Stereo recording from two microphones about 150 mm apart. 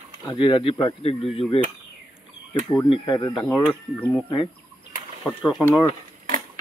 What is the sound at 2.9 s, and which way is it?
Speech, 35° left (ahead or behind).